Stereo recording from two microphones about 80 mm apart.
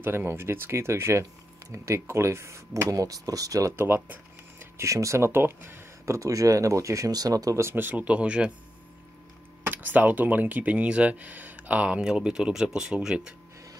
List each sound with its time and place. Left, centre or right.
0.0 s speech: right
3.7 s speech: right
6.1 s speech: right
7.6 s speech: right
9.7 s speech: right